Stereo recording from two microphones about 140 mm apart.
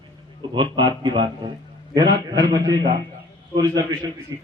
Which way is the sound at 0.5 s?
35° right (ahead or behind).